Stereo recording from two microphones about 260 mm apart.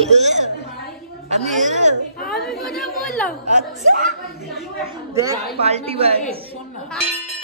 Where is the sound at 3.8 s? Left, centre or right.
Right.